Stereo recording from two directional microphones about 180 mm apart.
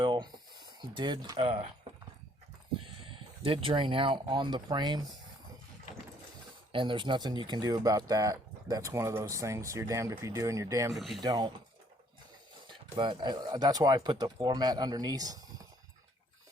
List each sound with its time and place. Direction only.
0.0 s a sound: 25° right (ahead or behind)
3.0 s speech: 30° right (ahead or behind)
6.7 s speech: 25° right (ahead or behind)
10.9 s speech: centre (ahead or behind)
11.2 s speech: 25° right (ahead or behind)
13.0 s speech: 25° right (ahead or behind)